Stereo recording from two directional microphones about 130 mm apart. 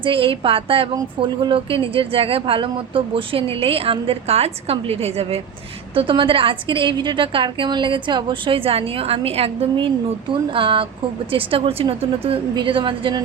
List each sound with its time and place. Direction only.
0.0 s a woman's voice: 40° right (ahead or behind)